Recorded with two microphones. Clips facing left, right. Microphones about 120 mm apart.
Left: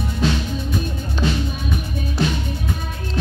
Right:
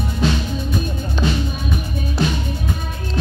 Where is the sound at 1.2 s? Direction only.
90° right.